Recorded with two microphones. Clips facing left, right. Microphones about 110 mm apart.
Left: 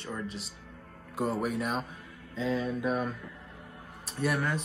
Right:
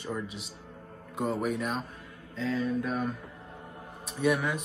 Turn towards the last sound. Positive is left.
turn(degrees=0)  # may be behind; listen again after turning